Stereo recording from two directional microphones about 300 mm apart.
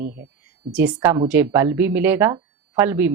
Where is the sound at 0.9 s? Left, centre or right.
Centre.